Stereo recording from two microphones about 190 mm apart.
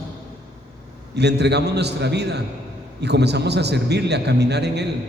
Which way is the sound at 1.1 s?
60° right (ahead or behind).